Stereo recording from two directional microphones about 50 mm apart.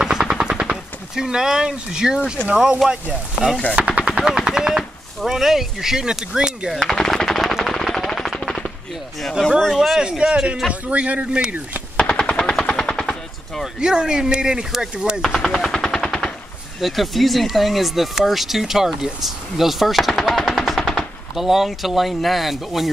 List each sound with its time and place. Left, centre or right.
0.0 s machine gun: centre
2.5 s speech: centre
3.7 s machine gun: right
4.3 s speech: centre
6.7 s machine gun: centre
9.9 s a man's voice: centre
11.2 s speech: centre
12.0 s machine gun: centre
13.7 s speech: centre
15.4 s machine gun: centre
16.8 s speech: centre